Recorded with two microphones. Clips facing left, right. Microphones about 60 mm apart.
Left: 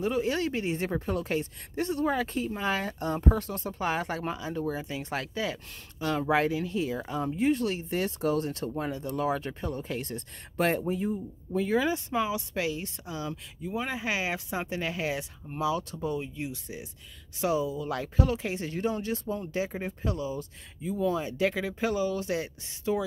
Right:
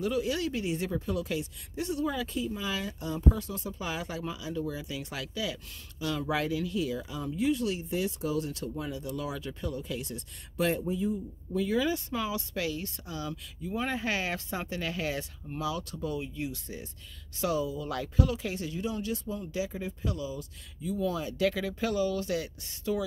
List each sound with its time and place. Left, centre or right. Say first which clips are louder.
0.0 s a woman's voice: left 2 dB; left
13.7 s a woman's voice: even; centre; by 18.7 s left
18.7 s a woman's voice: left 5 dB; left